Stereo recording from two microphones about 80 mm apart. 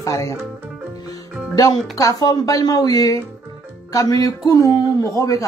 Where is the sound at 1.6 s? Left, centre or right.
Left.